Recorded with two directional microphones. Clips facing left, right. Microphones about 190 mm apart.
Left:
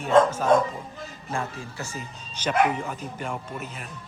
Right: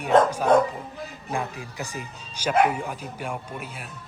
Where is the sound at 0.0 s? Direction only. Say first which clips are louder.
Even; 15° right (ahead or behind).